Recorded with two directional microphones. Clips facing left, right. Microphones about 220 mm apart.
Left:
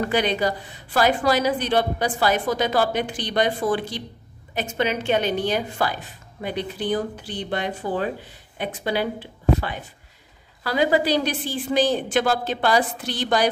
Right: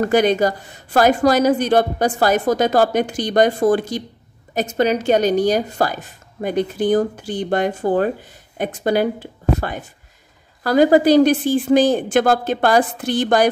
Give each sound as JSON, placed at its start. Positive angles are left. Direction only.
{"t": 0.0, "sound": "a woman's voice", "side_deg": -45}